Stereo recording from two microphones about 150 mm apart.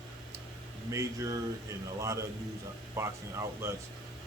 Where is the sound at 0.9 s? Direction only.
20° right (ahead or behind).